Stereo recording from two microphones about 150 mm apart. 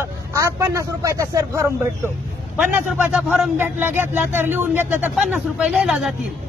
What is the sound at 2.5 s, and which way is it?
Speech, 10° right (ahead or behind).